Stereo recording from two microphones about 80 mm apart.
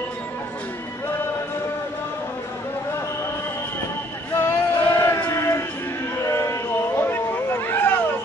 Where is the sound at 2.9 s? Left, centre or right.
Left.